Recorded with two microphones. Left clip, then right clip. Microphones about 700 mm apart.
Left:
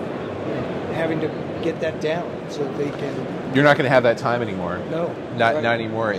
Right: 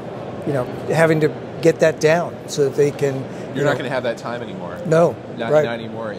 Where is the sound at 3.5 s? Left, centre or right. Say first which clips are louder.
Left 5 dB; left.